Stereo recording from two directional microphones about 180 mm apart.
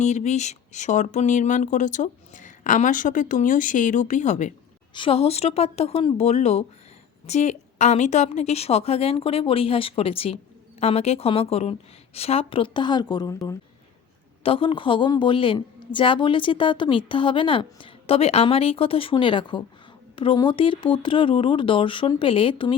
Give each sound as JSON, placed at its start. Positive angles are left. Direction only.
{"t": 0.0, "sound": "speech", "side_deg": 40}
{"t": 4.9, "sound": "speech", "side_deg": 30}
{"t": 14.4, "sound": "a woman's voice", "side_deg": 30}